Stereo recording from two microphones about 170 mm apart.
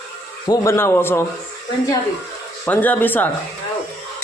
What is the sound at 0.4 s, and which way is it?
Speech, 20° left (ahead or behind).